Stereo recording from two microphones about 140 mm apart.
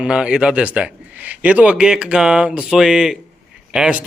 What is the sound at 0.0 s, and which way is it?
A man's voice, 5° right (ahead or behind).